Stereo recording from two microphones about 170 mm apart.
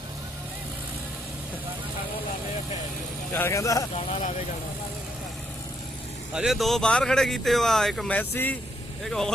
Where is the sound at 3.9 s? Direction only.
45° left (ahead or behind).